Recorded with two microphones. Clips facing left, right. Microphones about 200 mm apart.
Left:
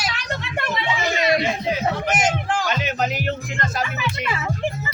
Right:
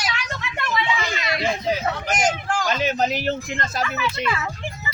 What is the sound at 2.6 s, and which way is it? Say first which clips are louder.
Music: right 2 dB; 30° right (ahead or behind).